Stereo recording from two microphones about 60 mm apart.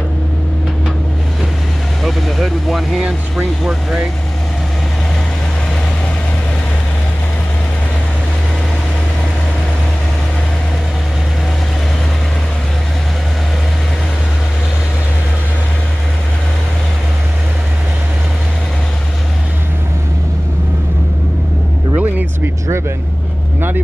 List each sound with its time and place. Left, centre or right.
2.0 s vehicle: centre
3.0 s speech: centre
21.9 s vehicle: right